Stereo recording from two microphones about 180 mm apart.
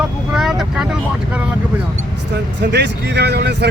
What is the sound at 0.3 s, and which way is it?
Vehicle, 5° right (ahead or behind).